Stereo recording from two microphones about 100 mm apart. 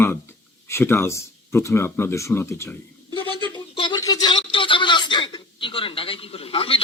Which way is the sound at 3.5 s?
55° left (ahead or behind).